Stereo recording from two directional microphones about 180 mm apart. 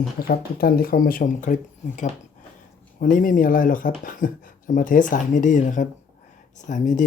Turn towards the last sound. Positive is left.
turn(degrees=45)  # may be behind; listen again after turning